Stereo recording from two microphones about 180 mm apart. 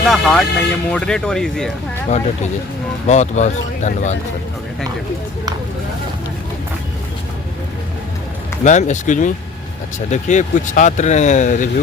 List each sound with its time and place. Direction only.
0.1 s speech: 5° left (ahead or behind)
3.1 s speech: 40° left (ahead or behind)
8.6 s speech: 40° left (ahead or behind)